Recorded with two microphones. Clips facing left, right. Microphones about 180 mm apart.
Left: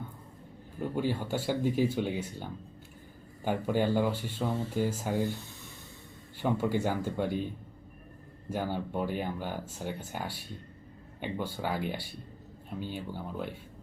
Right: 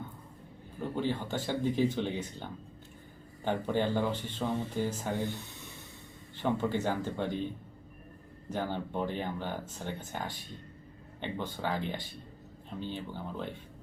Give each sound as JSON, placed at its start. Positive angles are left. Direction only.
{"t": 0.9, "sound": "speech", "side_deg": 10}
{"t": 6.3, "sound": "speech", "side_deg": 10}
{"t": 8.4, "sound": "speech", "side_deg": 10}